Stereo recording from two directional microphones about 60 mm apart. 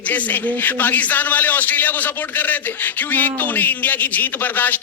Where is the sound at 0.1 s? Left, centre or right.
Left.